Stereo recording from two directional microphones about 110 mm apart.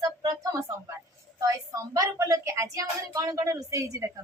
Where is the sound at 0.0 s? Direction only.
35° right (ahead or behind).